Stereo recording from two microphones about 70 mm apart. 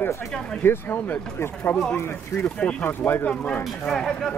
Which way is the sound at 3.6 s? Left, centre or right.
Centre.